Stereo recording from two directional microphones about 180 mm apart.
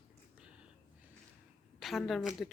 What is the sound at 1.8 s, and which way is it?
Speech, centre (ahead or behind).